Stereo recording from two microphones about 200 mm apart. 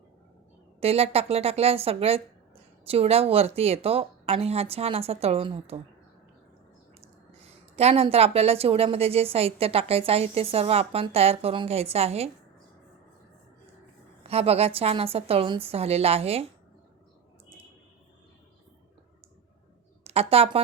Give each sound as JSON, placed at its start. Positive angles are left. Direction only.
{"t": 0.8, "sound": "a woman's voice", "side_deg": -30}
{"t": 7.4, "sound": "a woman's voice", "side_deg": -30}
{"t": 14.3, "sound": "a woman's voice", "side_deg": -30}
{"t": 20.1, "sound": "speech", "side_deg": -30}